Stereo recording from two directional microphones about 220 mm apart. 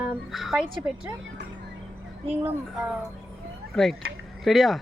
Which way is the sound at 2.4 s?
5° right (ahead or behind).